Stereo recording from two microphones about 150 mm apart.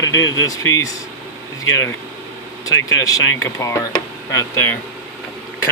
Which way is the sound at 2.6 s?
25° left (ahead or behind).